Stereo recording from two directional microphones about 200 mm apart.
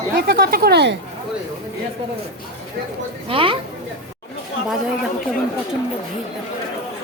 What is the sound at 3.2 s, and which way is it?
Speech, 25° right (ahead or behind).